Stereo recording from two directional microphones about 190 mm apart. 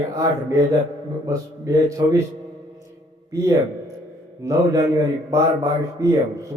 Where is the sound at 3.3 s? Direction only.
20° right (ahead or behind).